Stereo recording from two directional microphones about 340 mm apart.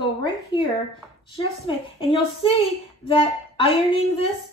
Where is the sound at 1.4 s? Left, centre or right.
Centre.